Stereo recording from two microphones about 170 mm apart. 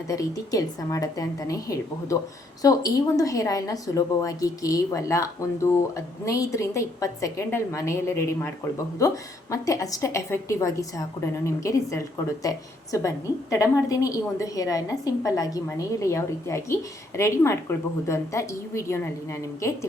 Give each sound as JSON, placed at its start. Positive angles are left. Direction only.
{"t": 0.1, "sound": "a woman's voice", "side_deg": 20}